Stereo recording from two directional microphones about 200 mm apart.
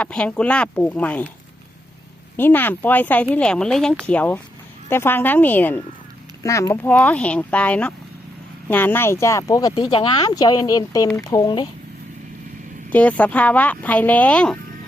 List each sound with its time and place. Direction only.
0.0 s speech: 5° left (ahead or behind)
2.3 s speech: 10° left (ahead or behind)
12.9 s speech: 5° left (ahead or behind)